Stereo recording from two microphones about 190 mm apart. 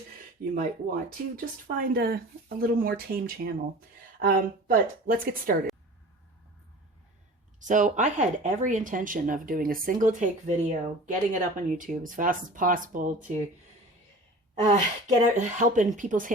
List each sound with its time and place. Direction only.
0.5 s speech: 45° right (ahead or behind)
7.6 s speech: 40° right (ahead or behind)
14.7 s speech: 40° right (ahead or behind)